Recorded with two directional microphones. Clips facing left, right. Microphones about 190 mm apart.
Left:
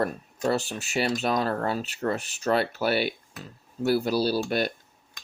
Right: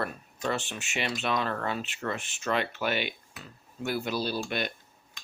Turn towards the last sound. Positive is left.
turn(degrees=40)  # may be behind; listen again after turning